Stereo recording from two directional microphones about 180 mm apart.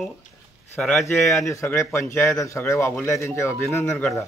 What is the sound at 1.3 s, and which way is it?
A man's voice, 15° left (ahead or behind).